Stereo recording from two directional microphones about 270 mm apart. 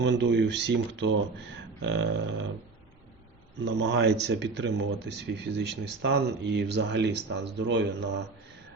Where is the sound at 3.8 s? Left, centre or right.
Right.